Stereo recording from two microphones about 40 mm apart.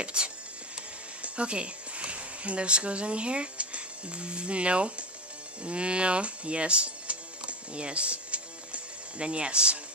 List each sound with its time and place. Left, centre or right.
0.0 s music: right
1.2 s speech: right
5.6 s music: right